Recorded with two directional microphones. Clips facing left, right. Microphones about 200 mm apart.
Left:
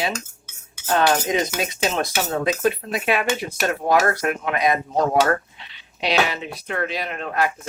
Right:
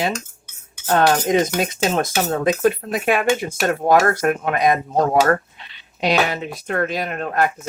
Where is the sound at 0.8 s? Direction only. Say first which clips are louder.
Right 3 dB; 50° right (ahead or behind).